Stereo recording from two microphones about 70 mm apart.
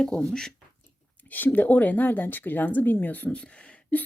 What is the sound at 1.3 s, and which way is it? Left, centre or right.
A woman's voice, left.